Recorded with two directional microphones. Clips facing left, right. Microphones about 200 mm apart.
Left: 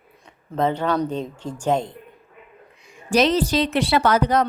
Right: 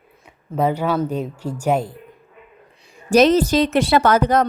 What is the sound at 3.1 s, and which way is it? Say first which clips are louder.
A woman's voice: right 5 dB; 45° right (ahead or behind).